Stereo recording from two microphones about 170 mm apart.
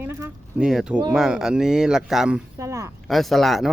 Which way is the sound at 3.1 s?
Centre (ahead or behind).